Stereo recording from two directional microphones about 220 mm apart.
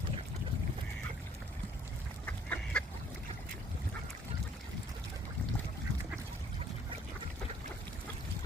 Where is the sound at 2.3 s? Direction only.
5° left (ahead or behind).